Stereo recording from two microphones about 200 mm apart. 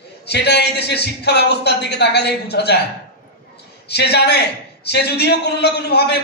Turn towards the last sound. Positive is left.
turn(degrees=55)  # may be behind; listen again after turning